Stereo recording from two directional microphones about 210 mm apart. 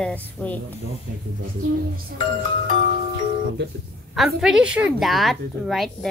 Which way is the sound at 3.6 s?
55° right (ahead or behind).